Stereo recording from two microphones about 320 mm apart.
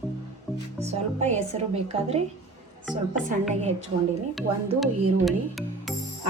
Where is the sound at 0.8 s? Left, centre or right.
Right.